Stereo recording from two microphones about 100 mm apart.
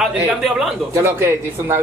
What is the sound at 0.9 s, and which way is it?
Speech, 25° right (ahead or behind).